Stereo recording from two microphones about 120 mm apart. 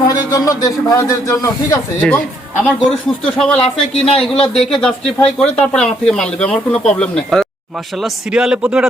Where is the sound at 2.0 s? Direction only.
10° left (ahead or behind).